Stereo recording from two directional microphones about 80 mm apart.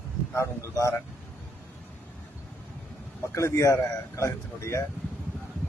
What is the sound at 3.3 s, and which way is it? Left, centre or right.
Speech, left.